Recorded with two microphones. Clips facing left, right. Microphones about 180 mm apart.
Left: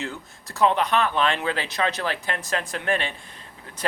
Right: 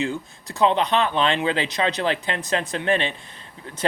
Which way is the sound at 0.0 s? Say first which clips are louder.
Right 7 dB; 15° right (ahead or behind).